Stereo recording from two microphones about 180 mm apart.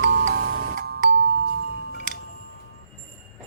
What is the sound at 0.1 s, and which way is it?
Music, 75° right (ahead or behind).